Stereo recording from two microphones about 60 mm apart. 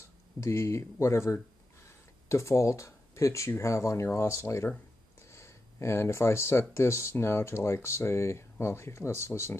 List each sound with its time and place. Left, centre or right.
0.4 s speech: left